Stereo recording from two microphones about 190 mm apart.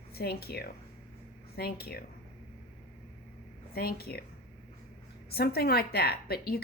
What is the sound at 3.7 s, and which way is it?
Speech, 55° left (ahead or behind).